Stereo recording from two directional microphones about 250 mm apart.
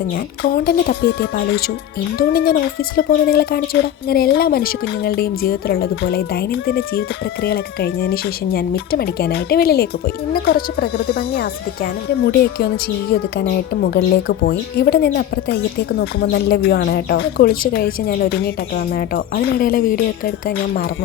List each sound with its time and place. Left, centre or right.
0.4 s speech: left